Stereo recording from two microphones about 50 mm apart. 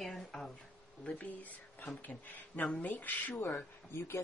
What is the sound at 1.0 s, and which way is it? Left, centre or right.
Speech, left.